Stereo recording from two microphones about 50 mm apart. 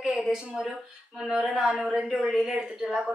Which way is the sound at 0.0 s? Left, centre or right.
Centre.